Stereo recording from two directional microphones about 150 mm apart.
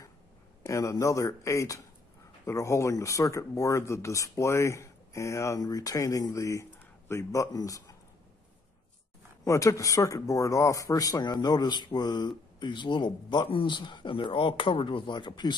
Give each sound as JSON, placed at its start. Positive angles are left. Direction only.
{"t": 0.7, "sound": "speech", "side_deg": 20}
{"t": 9.4, "sound": "speech", "side_deg": 20}